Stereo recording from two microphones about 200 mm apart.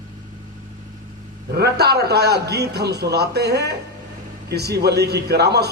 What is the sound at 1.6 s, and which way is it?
A man's voice, 55° right (ahead or behind).